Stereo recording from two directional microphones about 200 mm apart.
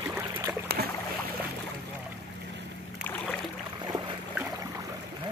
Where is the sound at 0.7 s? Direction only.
50° right (ahead or behind).